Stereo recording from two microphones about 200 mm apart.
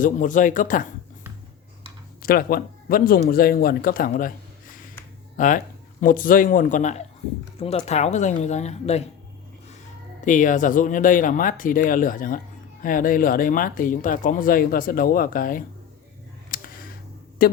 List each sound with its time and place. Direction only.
0.0 s speech: 40° left (ahead or behind)
2.2 s speech: 45° left (ahead or behind)
5.4 s speech: 40° left (ahead or behind)
10.2 s speech: 40° left (ahead or behind)
16.5 s a sound: 45° left (ahead or behind)
17.4 s speech: 50° left (ahead or behind)